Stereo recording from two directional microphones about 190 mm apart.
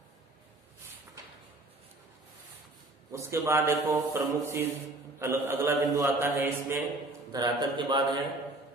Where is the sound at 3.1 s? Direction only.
15° right (ahead or behind).